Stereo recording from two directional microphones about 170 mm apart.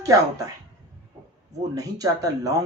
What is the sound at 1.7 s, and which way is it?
Speech, 20° right (ahead or behind).